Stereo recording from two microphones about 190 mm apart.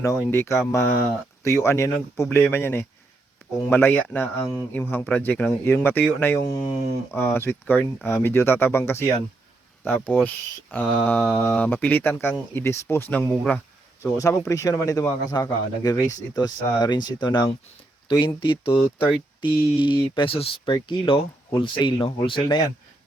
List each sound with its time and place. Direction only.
0.3 s speech: 15° left (ahead or behind)
14.0 s speech: 15° left (ahead or behind)